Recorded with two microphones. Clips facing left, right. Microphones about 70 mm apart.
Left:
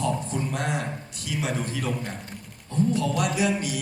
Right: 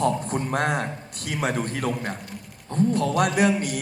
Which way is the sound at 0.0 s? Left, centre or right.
Right.